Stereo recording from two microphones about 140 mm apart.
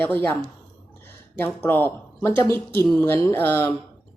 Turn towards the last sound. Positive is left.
turn(degrees=15)  # may be behind; listen again after turning